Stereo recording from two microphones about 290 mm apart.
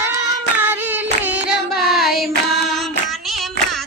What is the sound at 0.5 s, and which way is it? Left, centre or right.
Hands, centre.